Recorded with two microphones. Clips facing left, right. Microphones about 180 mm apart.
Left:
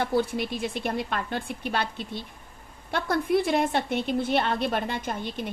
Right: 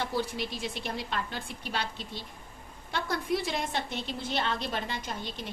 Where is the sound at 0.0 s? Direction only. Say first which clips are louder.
Left 6 dB; 55° left (ahead or behind).